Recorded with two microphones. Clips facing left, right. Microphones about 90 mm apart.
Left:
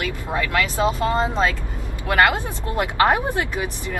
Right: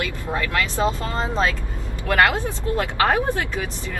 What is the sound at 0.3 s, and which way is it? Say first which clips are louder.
Speech: left 2 dB; 15° left (ahead or behind).